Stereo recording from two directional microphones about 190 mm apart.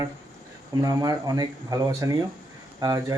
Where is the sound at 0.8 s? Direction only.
20° right (ahead or behind).